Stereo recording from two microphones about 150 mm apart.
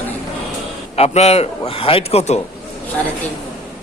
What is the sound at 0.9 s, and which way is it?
A man's voice, 45° left (ahead or behind).